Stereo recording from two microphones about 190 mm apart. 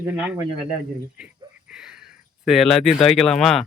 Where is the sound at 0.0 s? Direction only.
5° right (ahead or behind).